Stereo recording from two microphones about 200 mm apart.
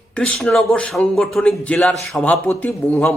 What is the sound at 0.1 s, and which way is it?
A man's voice, 5° left (ahead or behind).